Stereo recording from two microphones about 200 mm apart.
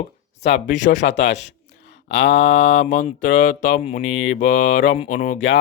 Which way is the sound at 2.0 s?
60° left (ahead or behind).